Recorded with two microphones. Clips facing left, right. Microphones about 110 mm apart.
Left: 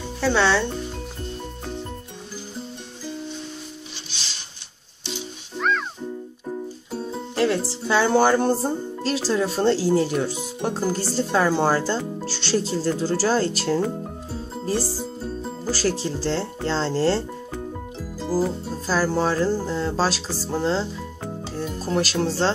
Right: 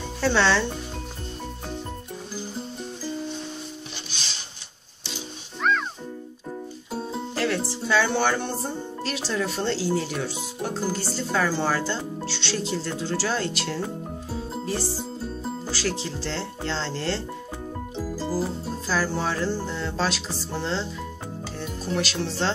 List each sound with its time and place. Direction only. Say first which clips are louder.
0.2 s speech: left 2 dB; 15° left (ahead or behind)
7.3 s music: left 5 dB; 25° left (ahead or behind)
8.1 s speech: left 7 dB; 40° left (ahead or behind)
15.7 s speech: left 7 dB; 40° left (ahead or behind)
18.9 s speech: left 5 dB; 40° left (ahead or behind)